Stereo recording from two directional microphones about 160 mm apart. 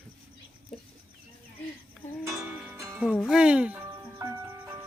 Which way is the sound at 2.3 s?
5° right (ahead or behind).